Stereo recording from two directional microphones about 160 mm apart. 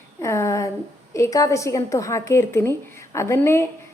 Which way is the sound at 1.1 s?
20° left (ahead or behind).